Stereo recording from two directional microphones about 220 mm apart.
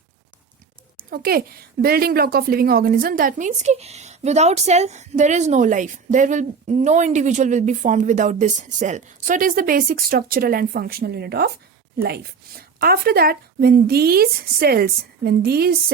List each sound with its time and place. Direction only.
0.9 s a woman's voice: 45° right (ahead or behind)